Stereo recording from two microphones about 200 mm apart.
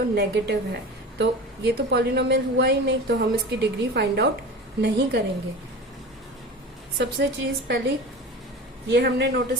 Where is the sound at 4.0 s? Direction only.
55° right (ahead or behind).